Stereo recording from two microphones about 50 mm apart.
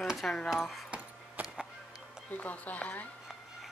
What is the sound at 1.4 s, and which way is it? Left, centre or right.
Music, right.